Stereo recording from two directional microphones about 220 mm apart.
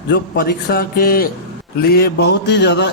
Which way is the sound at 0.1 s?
45° left (ahead or behind).